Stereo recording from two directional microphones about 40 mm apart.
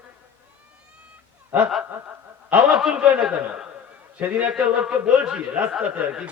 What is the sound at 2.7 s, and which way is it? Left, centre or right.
Speech, centre.